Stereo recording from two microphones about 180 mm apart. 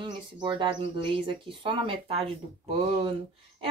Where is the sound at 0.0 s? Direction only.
25° right (ahead or behind).